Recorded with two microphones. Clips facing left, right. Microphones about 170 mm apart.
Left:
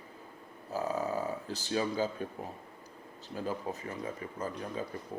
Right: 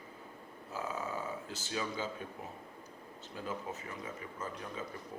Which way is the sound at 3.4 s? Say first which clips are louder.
Left 5 dB; 35° left (ahead or behind).